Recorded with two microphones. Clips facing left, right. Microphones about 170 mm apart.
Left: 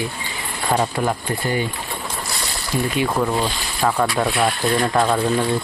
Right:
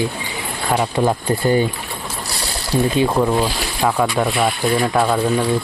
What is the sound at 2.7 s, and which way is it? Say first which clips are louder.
Speech: right 5 dB; 30° right (ahead or behind).